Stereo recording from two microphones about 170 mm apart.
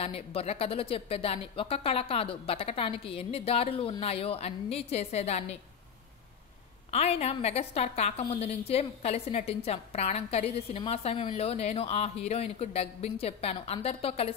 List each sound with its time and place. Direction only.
0.0 s a woman's voice: 35° left (ahead or behind)
6.9 s a woman's voice: 35° left (ahead or behind)